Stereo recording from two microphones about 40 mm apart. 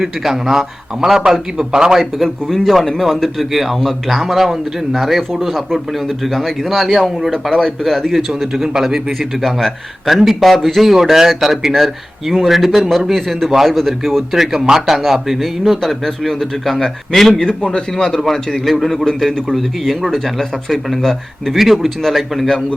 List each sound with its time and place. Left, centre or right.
0.0 s a man's voice: centre
2.0 s a man's voice: centre
8.1 s a man's voice: centre
9.4 s speech: centre
14.3 s speech: centre
17.4 s a man's voice: left
21.5 s speech: centre